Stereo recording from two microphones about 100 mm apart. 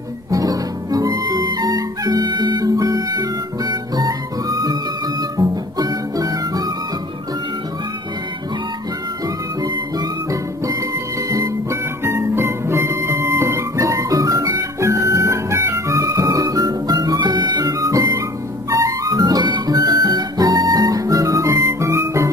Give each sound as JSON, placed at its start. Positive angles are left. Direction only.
{"t": 0.3, "sound": "music", "side_deg": -35}
{"t": 9.6, "sound": "music", "side_deg": -40}
{"t": 17.6, "sound": "music", "side_deg": -30}